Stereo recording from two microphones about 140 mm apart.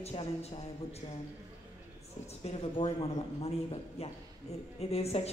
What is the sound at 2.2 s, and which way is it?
A man's voice, 50° left (ahead or behind).